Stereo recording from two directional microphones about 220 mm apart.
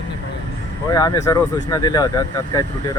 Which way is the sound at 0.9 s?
15° left (ahead or behind).